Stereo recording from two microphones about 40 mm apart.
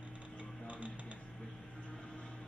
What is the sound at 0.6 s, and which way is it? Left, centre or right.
Music, right.